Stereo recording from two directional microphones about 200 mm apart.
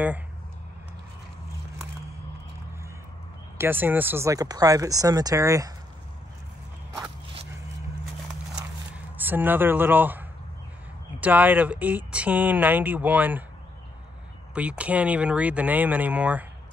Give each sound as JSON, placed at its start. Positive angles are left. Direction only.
{"t": 3.5, "sound": "speech", "side_deg": -10}
{"t": 8.9, "sound": "speech", "side_deg": -10}
{"t": 14.5, "sound": "speech", "side_deg": -5}